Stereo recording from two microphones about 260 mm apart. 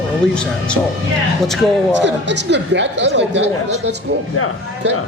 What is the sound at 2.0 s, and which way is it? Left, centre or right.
Speech, right.